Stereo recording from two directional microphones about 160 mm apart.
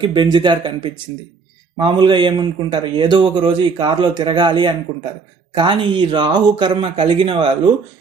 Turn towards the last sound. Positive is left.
turn(degrees=-30)  # may be behind; listen again after turning